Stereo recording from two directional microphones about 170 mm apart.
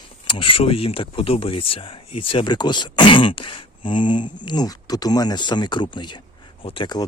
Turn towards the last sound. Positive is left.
turn(degrees=25)  # may be behind; listen again after turning